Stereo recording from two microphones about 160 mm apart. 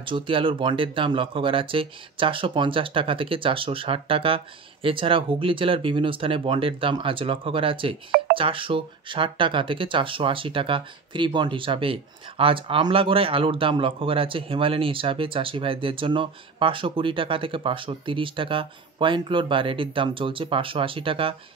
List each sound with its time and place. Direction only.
0.0 s speech: 30° right (ahead or behind)